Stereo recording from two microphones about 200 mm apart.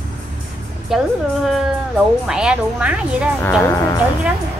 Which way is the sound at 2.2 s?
5° right (ahead or behind).